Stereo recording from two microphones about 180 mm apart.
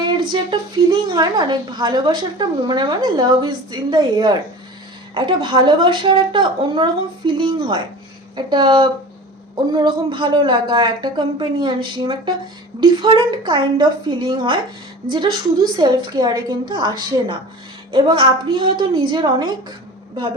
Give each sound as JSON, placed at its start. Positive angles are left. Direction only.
{"t": 0.3, "sound": "a woman's voice", "side_deg": -25}